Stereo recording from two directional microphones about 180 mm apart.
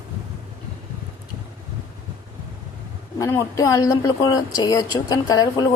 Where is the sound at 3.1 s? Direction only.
20° left (ahead or behind).